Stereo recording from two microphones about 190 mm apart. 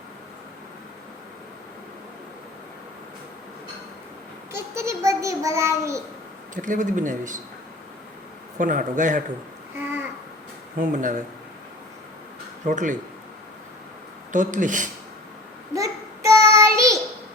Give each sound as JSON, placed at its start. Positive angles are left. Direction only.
{"t": 4.5, "sound": "a child's voice", "side_deg": -15}
{"t": 6.5, "sound": "speech", "side_deg": -40}
{"t": 8.5, "sound": "speech", "side_deg": -45}
{"t": 10.8, "sound": "speech", "side_deg": -45}
{"t": 12.6, "sound": "speech", "side_deg": -45}
{"t": 14.3, "sound": "speech", "side_deg": -45}
{"t": 15.7, "sound": "child singing", "side_deg": -15}